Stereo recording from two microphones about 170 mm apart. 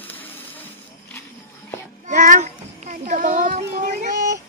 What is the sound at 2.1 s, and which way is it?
Child singing, 50° right (ahead or behind).